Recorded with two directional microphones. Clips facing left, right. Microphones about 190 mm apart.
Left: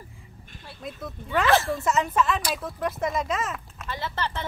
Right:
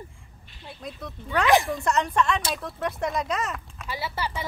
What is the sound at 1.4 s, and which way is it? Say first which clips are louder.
Speech: right 1 dB; 15° right (ahead or behind).